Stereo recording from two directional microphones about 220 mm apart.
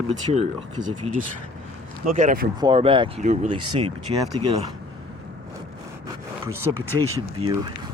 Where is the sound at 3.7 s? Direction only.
20° right (ahead or behind).